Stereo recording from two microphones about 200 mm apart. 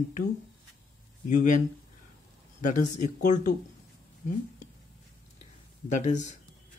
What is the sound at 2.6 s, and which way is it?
Speech, 40° left (ahead or behind).